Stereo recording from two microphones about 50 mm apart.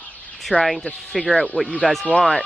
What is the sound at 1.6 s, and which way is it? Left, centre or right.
Speech, left.